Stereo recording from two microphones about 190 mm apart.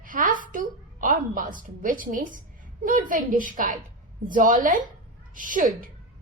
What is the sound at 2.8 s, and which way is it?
A woman's voice, 45° right (ahead or behind).